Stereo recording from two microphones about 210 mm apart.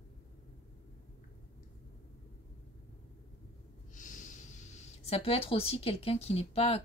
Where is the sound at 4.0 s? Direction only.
35° left (ahead or behind).